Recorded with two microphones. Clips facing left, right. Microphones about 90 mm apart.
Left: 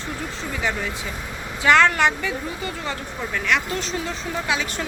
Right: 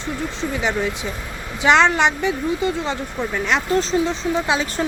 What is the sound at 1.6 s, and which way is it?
A woman's voice, 20° right (ahead or behind).